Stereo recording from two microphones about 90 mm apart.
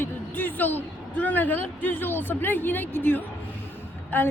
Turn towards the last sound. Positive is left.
turn(degrees=20)  # may be behind; listen again after turning